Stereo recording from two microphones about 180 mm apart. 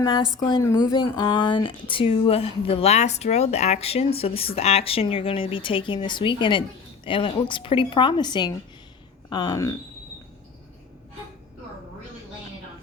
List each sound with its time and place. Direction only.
0.0 s speech: 25° left (ahead or behind)